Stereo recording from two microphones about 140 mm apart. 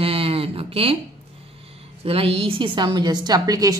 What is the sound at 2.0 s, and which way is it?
Speech, 40° right (ahead or behind).